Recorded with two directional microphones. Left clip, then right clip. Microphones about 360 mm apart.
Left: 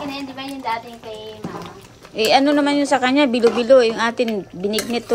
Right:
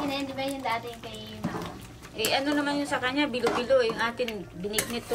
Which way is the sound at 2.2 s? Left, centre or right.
Centre.